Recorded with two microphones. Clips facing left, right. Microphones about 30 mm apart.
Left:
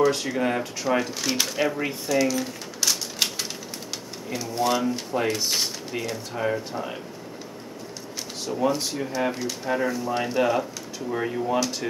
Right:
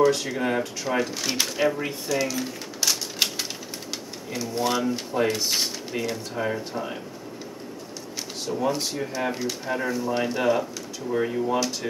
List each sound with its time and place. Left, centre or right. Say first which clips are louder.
0.0 s speech: right 1 dB; centre
8.5 s speech: left 1 dB; centre